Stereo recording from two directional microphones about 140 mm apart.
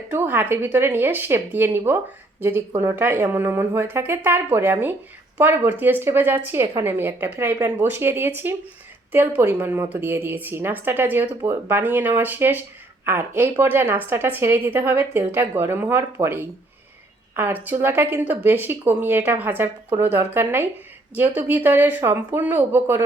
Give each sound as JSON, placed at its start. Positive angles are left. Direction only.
{"t": 0.1, "sound": "a woman's voice", "side_deg": -15}